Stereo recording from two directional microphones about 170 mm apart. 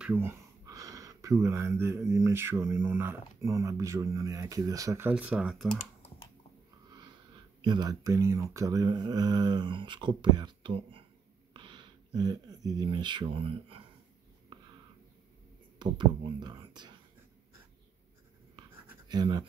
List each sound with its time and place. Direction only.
0.0 s a sound: 10° right (ahead or behind)
2.0 s speech: 15° right (ahead or behind)
7.6 s speech: 25° right (ahead or behind)
15.8 s speech: 25° right (ahead or behind)
18.6 s writing: 25° right (ahead or behind)